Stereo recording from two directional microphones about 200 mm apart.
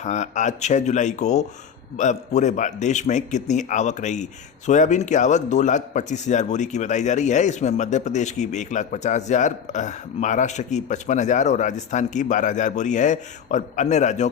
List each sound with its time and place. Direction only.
0.0 s a man's voice: 35° left (ahead or behind)